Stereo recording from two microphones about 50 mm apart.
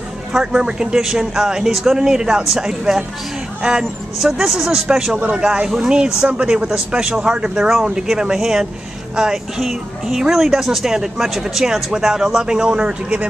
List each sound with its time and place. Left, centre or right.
0.3 s speech: centre
4.2 s a man's voice: centre; by 13.3 s right